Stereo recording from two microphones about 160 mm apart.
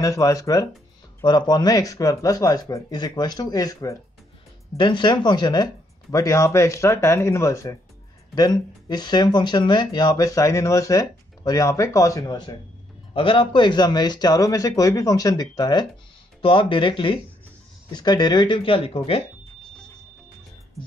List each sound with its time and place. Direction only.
0.0 s speech: 20° left (ahead or behind)